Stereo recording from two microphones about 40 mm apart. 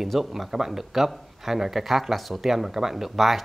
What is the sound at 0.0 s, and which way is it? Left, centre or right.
Speech, centre.